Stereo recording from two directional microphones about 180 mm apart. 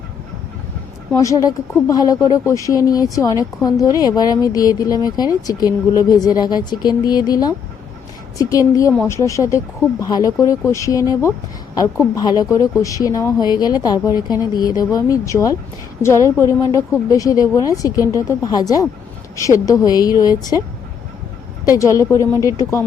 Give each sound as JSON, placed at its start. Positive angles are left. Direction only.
{"t": 1.1, "sound": "a woman's voice", "side_deg": 20}
{"t": 21.8, "sound": "speech", "side_deg": 15}